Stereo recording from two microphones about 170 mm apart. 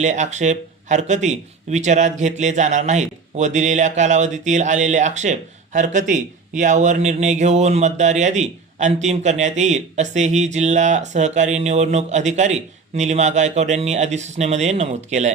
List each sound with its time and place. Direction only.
0.0 s speech: 45° right (ahead or behind)